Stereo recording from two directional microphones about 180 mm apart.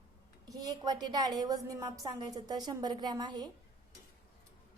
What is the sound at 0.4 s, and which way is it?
A woman's voice, 20° right (ahead or behind).